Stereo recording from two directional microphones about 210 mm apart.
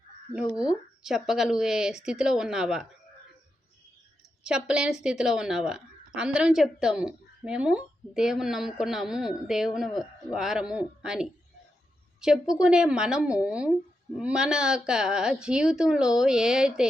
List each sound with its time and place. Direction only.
0.3 s a woman's voice: 5° right (ahead or behind)
4.4 s a woman's voice: 5° right (ahead or behind)